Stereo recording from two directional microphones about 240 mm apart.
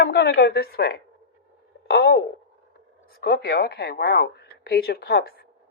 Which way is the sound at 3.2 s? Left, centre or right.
Left.